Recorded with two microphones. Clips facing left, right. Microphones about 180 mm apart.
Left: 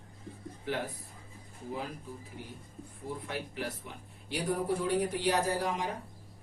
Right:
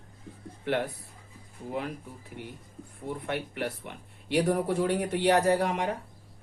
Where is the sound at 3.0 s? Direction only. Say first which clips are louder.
Right 5 dB; 65° right (ahead or behind).